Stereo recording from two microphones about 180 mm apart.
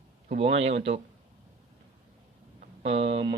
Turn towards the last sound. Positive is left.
turn(degrees=-35)  # may be behind; listen again after turning